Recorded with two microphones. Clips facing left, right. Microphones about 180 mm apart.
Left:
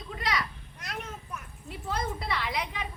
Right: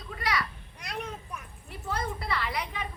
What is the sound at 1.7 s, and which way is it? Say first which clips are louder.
A woman's voice: left 1 dB; 20° left (ahead or behind).